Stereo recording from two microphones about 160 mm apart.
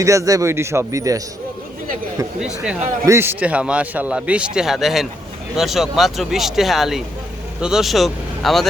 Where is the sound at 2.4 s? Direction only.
5° right (ahead or behind).